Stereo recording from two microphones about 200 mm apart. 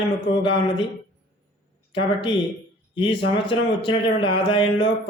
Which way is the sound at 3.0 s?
25° left (ahead or behind).